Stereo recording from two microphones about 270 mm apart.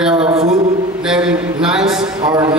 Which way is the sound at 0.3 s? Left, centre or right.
Right.